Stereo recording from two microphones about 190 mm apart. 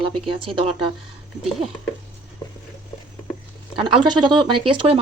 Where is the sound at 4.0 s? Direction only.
25° right (ahead or behind).